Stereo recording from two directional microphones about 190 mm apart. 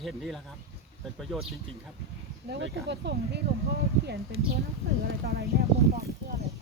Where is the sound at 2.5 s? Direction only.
60° right (ahead or behind).